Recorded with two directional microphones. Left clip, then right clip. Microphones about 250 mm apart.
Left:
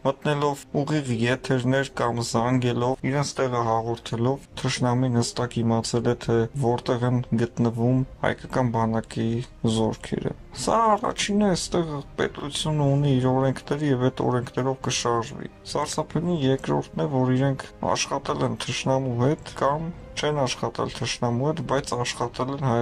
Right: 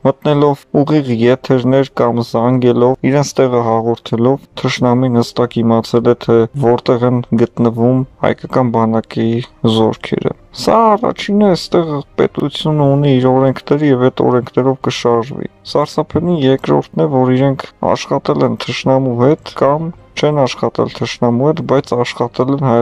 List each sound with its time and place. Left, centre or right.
0.0 s speech: right